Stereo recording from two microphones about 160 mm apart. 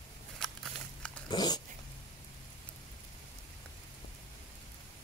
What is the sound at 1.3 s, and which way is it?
Cat, 25° left (ahead or behind).